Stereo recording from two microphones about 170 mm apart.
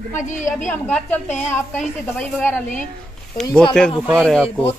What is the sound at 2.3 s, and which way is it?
Speech, 5° left (ahead or behind).